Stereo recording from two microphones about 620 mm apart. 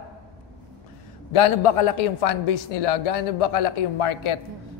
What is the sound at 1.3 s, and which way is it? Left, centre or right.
A woman's voice, left.